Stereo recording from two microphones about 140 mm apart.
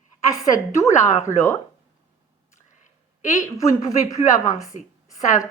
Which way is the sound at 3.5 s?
25° left (ahead or behind).